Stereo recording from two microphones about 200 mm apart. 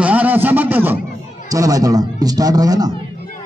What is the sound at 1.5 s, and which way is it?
A man's voice, 15° right (ahead or behind).